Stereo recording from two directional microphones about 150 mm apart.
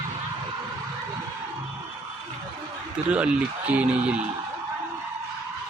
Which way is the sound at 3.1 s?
10° right (ahead or behind).